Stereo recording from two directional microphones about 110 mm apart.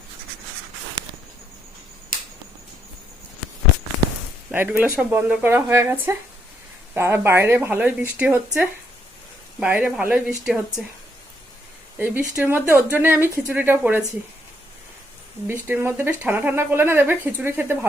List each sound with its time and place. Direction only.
4.5 s speech: 20° right (ahead or behind)
11.9 s speech: 15° right (ahead or behind)
15.4 s speech: 15° right (ahead or behind)